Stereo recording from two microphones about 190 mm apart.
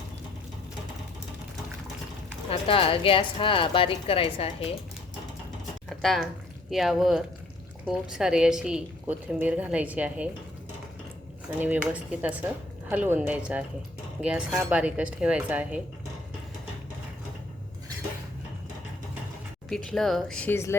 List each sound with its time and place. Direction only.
2.5 s a woman's voice: 30° left (ahead or behind)
5.9 s a sound: centre (ahead or behind)
6.7 s a woman's voice: centre (ahead or behind)
11.4 s a woman's voice: 10° right (ahead or behind)
19.7 s a woman's voice: 5° left (ahead or behind)